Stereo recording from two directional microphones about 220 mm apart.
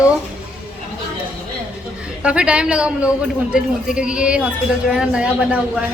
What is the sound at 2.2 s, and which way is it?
A man's voice, 5° right (ahead or behind).